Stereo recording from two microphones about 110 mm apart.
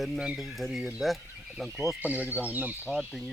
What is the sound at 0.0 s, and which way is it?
Speech, centre (ahead or behind).